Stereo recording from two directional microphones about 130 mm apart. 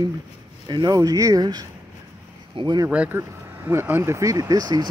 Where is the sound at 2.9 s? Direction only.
10° right (ahead or behind).